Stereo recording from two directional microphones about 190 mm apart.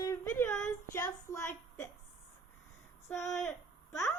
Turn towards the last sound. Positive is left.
turn(degrees=15)  # may be behind; listen again after turning